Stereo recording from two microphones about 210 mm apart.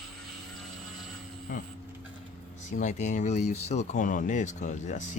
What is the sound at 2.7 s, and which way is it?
Speech, 35° left (ahead or behind).